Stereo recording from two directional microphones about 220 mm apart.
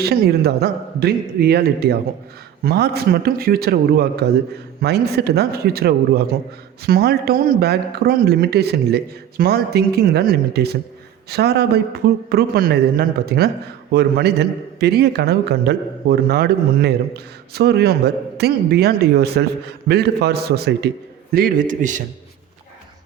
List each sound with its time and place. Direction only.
0.0 s a man's voice: 45° right (ahead or behind)